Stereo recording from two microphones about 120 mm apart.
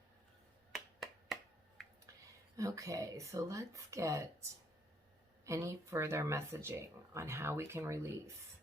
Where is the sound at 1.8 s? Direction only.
Centre (ahead or behind).